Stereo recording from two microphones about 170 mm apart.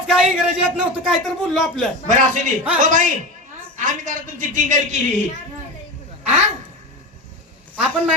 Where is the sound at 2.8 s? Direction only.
50° right (ahead or behind).